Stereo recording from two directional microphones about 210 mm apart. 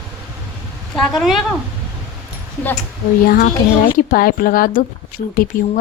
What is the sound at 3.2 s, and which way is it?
Speech, 45° left (ahead or behind).